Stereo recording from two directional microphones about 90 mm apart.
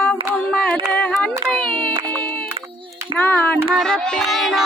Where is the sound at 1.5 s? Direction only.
10° left (ahead or behind).